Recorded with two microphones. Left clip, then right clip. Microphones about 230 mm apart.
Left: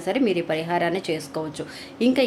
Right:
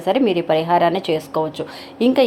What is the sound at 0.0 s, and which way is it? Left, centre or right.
A woman's voice, centre.